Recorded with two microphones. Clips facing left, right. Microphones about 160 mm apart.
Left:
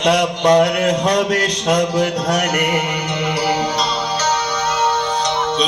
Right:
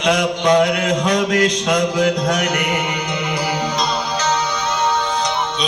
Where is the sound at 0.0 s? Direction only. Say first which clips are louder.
Left 2 dB; 35° left (ahead or behind).